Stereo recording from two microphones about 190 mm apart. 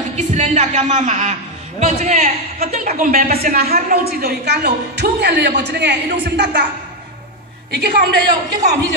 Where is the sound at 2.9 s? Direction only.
50° right (ahead or behind).